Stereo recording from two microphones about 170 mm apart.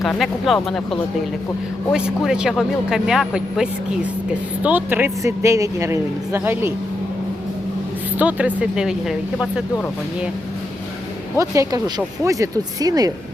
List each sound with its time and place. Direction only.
0.0 s speech: centre (ahead or behind)
8.1 s speech: 10° right (ahead or behind)
11.3 s speech: 20° right (ahead or behind)